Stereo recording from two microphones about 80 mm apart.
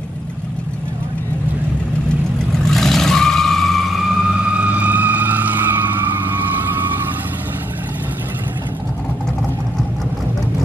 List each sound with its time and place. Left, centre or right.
2.6 s vehicle: centre
4.6 s vehicle: centre